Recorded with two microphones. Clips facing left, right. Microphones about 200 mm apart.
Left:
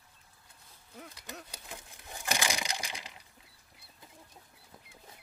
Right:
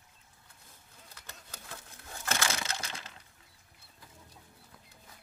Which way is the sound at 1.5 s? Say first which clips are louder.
Left 1 dB; 15° left (ahead or behind).